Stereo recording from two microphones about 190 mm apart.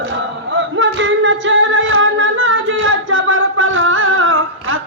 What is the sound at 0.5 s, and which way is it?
Singing, 75° right (ahead or behind).